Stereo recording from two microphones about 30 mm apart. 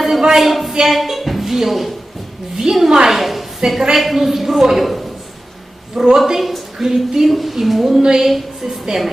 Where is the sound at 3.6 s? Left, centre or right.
Centre.